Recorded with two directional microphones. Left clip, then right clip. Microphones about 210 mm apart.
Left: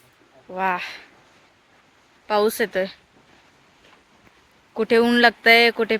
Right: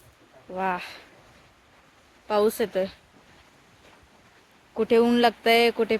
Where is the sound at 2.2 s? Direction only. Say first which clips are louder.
Left 3 dB; 5° right (ahead or behind).